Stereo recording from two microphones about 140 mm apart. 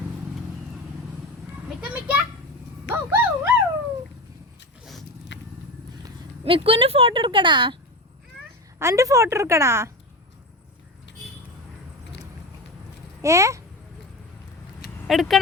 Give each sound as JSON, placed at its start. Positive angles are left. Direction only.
{"t": 1.8, "sound": "a child's voice", "side_deg": -10}
{"t": 2.9, "sound": "dog", "side_deg": -15}
{"t": 6.4, "sound": "speech", "side_deg": -45}
{"t": 8.8, "sound": "speech", "side_deg": -20}
{"t": 13.2, "sound": "speech", "side_deg": -20}
{"t": 15.0, "sound": "speech", "side_deg": 0}